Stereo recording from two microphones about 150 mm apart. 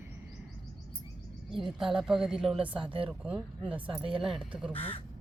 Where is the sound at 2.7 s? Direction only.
35° right (ahead or behind).